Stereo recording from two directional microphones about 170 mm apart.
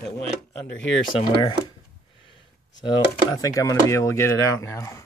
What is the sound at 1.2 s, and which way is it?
Speech, 25° left (ahead or behind).